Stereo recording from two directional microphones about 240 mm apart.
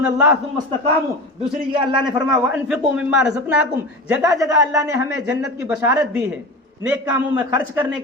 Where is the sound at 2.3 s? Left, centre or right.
Centre.